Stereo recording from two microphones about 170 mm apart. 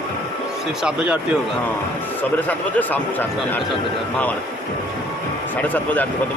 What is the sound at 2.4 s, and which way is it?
Speech, 10° left (ahead or behind).